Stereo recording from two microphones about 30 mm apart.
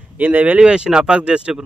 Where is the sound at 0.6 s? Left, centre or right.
Right.